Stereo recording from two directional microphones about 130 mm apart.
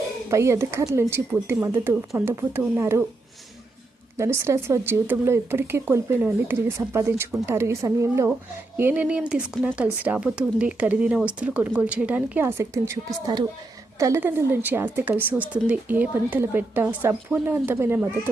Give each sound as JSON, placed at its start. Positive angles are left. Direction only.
{"t": 0.3, "sound": "speech", "side_deg": -20}
{"t": 4.2, "sound": "speech", "side_deg": -20}
{"t": 8.8, "sound": "speech", "side_deg": -10}